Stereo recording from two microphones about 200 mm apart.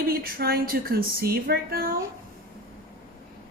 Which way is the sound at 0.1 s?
50° right (ahead or behind).